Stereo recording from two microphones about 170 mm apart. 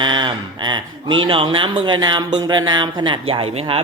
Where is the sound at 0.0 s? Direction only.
30° right (ahead or behind).